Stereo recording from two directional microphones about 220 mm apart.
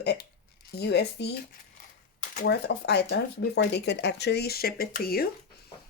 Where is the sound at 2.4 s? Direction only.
50° left (ahead or behind).